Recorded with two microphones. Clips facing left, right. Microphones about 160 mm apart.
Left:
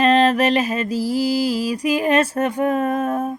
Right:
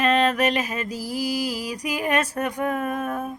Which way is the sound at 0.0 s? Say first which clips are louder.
Left 5 dB; 30° left (ahead or behind).